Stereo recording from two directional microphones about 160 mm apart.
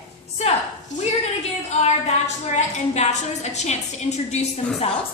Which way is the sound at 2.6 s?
45° left (ahead or behind).